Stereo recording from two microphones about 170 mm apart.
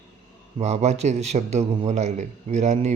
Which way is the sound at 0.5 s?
40° right (ahead or behind).